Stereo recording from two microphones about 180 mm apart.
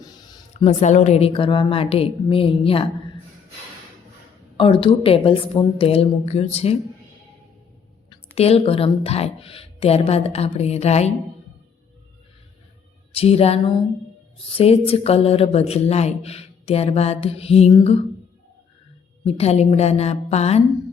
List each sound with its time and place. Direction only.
0.0 s a sound: 20° left (ahead or behind)
0.5 s speech: 40° left (ahead or behind)
4.5 s speech: 30° left (ahead or behind)
8.4 s speech: 35° left (ahead or behind)
13.1 s speech: 35° left (ahead or behind)
19.2 s speech: 35° left (ahead or behind)